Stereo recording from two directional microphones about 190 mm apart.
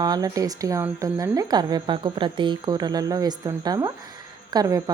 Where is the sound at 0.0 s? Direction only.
20° right (ahead or behind).